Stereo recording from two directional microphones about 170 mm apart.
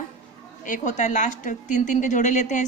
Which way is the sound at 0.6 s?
50° left (ahead or behind).